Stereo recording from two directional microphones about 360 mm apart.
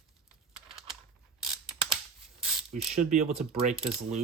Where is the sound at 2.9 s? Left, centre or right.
Centre.